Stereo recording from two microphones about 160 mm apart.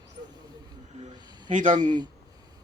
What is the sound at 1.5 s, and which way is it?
Speech, 50° right (ahead or behind).